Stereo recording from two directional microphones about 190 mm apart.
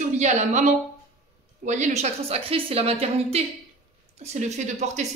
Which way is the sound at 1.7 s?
40° right (ahead or behind).